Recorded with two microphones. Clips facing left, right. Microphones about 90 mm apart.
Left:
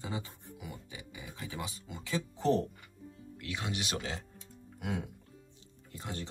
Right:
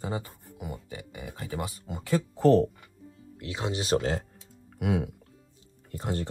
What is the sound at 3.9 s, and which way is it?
Speech, 50° right (ahead or behind).